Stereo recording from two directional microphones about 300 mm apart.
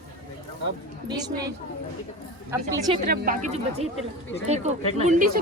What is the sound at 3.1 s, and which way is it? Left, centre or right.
Speech, right.